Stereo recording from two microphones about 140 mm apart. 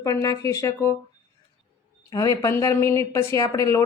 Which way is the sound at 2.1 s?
20° left (ahead or behind).